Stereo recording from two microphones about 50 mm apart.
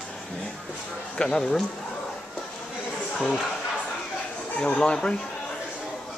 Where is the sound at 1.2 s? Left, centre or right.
Centre.